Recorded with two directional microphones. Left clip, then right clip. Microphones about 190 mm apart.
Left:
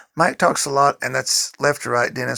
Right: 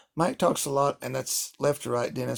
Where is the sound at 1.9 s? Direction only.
55° left (ahead or behind).